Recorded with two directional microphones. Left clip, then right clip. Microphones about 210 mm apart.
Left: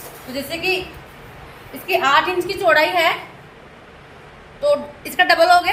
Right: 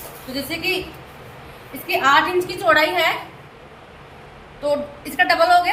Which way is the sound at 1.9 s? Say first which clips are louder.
Even; 30° left (ahead or behind).